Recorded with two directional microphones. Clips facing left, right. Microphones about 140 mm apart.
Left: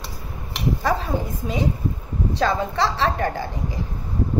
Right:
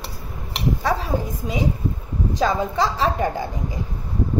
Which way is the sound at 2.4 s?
15° right (ahead or behind).